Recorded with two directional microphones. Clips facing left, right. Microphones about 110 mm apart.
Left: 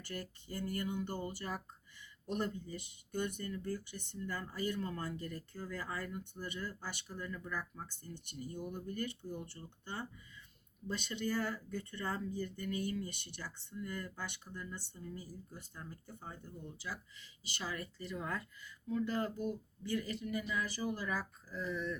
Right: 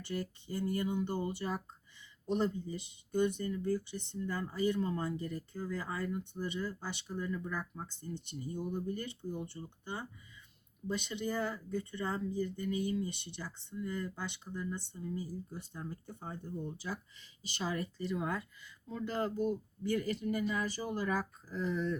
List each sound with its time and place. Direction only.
0.6 s speech: 20° right (ahead or behind)
19.4 s speech: 40° right (ahead or behind)